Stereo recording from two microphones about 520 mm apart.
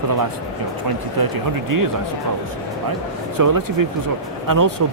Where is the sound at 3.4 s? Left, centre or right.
Right.